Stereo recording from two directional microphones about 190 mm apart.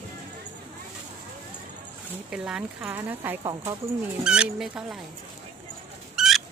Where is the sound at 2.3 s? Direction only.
5° right (ahead or behind).